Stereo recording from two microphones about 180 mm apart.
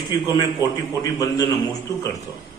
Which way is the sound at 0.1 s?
20° left (ahead or behind).